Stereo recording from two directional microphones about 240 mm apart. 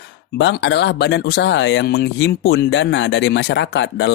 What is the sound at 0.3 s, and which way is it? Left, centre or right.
Speech, left.